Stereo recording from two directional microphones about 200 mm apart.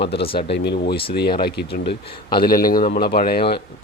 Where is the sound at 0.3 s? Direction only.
60° left (ahead or behind).